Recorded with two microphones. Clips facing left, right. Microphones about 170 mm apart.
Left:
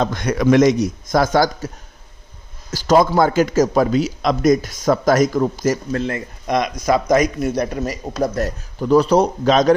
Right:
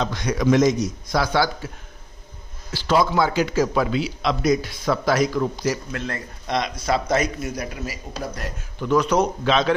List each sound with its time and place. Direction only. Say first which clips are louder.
0.0 s a man's voice: left 4 dB; 55° left (ahead or behind)
2.7 s a man's voice: left 5 dB; 45° left (ahead or behind)
5.9 s speech: left 7 dB; 25° left (ahead or behind)
6.8 s speech: left 6 dB; 25° right (ahead or behind)
7.5 s speech: left 9 dB; 40° left (ahead or behind)